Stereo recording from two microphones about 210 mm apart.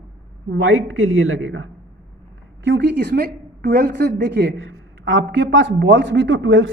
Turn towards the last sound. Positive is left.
turn(degrees=-65)  # may be behind; listen again after turning